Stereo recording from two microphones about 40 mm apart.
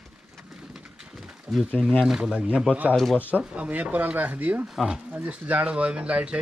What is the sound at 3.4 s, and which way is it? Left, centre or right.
Speech, right.